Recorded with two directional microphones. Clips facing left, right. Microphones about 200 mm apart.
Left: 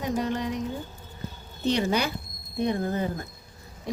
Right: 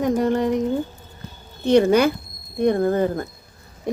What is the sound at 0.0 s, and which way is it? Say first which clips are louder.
Speech: right 8 dB; 50° right (ahead or behind).